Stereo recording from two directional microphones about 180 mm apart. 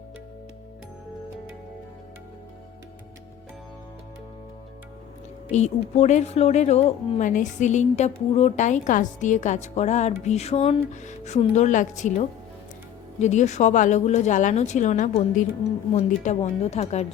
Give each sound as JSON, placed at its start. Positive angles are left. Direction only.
{"t": 5.5, "sound": "a woman's voice", "side_deg": 40}